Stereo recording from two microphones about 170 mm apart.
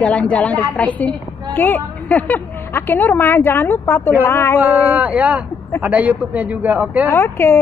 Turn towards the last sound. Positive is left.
turn(degrees=15)  # may be behind; listen again after turning